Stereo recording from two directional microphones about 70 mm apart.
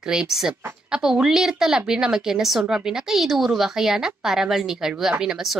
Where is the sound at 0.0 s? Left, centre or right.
Centre.